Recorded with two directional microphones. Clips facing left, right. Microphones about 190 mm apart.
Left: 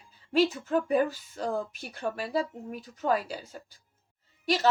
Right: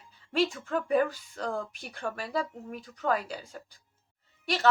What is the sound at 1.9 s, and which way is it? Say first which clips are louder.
Speech: left 3 dB; 20° left (ahead or behind).